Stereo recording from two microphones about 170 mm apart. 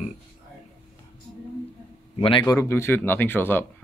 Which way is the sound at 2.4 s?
15° left (ahead or behind).